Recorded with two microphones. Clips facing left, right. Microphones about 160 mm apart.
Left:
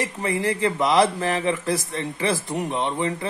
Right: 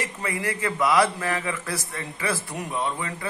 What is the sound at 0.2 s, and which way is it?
A man's voice, 30° left (ahead or behind).